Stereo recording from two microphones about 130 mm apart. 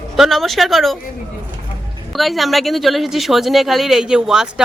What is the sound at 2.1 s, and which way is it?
Speech, centre (ahead or behind).